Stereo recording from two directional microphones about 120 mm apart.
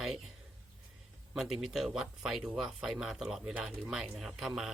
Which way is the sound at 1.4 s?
5° right (ahead or behind).